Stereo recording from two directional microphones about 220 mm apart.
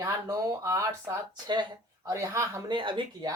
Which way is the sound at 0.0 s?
15° right (ahead or behind).